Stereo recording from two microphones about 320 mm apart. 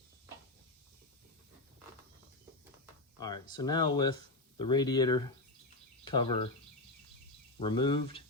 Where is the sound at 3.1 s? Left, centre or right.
Centre.